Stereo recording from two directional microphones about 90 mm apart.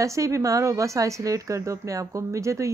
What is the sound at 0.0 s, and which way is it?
Speech, 35° right (ahead or behind).